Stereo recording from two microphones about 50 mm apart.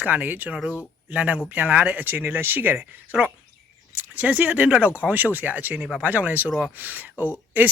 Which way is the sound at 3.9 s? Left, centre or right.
Right.